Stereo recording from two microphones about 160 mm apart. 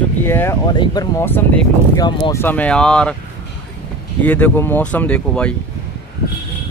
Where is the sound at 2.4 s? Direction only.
10° left (ahead or behind).